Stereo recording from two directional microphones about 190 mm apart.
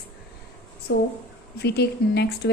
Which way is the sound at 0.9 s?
70° left (ahead or behind).